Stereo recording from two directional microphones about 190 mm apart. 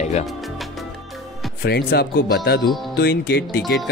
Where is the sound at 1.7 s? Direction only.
55° left (ahead or behind).